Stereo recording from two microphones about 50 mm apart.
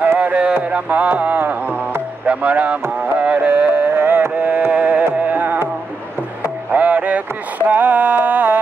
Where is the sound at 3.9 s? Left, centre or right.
Right.